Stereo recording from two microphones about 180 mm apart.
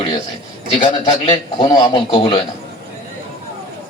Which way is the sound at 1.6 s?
30° left (ahead or behind).